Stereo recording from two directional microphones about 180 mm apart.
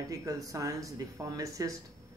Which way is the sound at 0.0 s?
20° right (ahead or behind).